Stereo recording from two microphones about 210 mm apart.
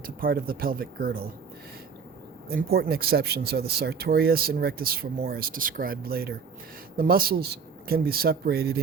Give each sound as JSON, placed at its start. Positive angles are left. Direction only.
{"t": 0.0, "sound": "speech", "side_deg": -45}
{"t": 2.5, "sound": "speech", "side_deg": -45}